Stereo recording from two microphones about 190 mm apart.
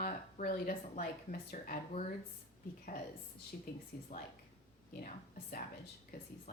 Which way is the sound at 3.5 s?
50° left (ahead or behind).